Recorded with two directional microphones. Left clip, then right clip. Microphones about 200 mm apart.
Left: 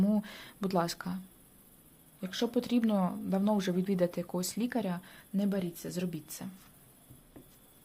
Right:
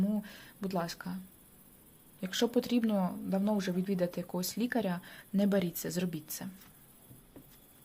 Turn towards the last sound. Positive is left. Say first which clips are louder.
# right 1 dB
turn(degrees=0)  # may be behind; listen again after turning